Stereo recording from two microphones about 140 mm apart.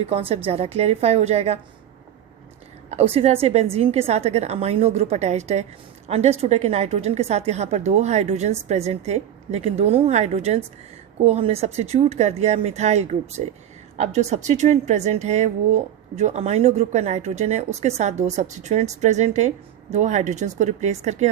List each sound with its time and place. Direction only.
0.0 s a woman's voice: 45° right (ahead or behind)
2.9 s a woman's voice: 45° right (ahead or behind)